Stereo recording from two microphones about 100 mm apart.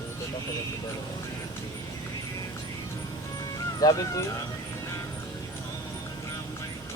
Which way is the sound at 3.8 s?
35° left (ahead or behind).